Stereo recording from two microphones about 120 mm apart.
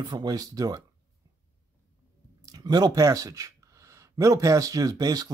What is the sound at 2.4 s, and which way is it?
Speech, 30° right (ahead or behind).